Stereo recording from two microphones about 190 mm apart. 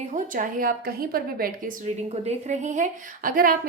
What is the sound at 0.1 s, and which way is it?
A woman's voice, 45° right (ahead or behind).